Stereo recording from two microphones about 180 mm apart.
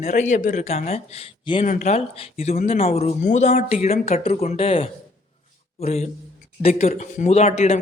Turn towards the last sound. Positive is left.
turn(degrees=40)  # may be behind; listen again after turning